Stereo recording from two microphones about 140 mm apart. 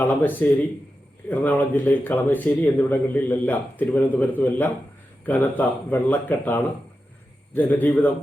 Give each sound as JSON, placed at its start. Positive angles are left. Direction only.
{"t": 0.0, "sound": "speech", "side_deg": 15}